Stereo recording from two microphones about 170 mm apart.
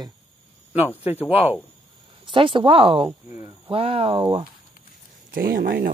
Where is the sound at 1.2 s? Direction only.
10° right (ahead or behind).